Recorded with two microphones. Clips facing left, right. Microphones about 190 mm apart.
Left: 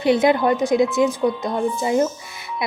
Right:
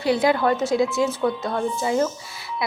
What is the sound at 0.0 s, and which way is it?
A woman's voice, 20° left (ahead or behind).